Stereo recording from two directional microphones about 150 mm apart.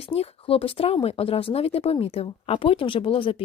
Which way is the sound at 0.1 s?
40° left (ahead or behind).